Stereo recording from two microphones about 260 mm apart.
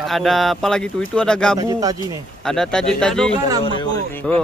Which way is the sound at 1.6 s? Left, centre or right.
Centre.